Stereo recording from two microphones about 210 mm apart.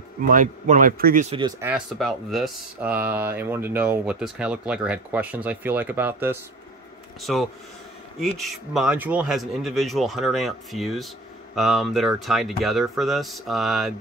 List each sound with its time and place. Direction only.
0.3 s speech: 40° right (ahead or behind)
1.6 s speech: 5° right (ahead or behind)